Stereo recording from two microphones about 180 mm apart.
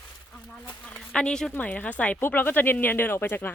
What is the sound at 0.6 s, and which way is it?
Speech, 5° left (ahead or behind).